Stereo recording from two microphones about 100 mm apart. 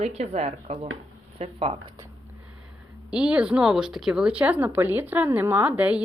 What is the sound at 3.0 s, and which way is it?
Speech, 10° right (ahead or behind).